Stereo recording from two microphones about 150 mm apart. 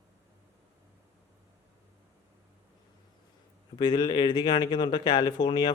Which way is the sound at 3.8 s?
30° left (ahead or behind).